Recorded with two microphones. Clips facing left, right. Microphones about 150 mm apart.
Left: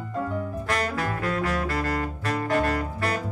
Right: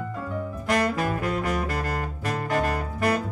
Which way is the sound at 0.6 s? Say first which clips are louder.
Right 6 dB; 15° right (ahead or behind).